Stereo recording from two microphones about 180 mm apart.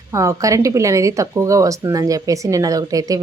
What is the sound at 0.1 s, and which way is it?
Speech, 15° right (ahead or behind).